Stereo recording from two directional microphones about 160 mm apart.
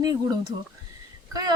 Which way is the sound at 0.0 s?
25° right (ahead or behind).